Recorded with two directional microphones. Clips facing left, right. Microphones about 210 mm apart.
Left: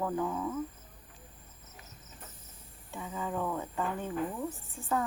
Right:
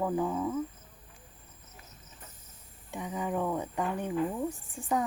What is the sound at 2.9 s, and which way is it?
Speech, 15° right (ahead or behind).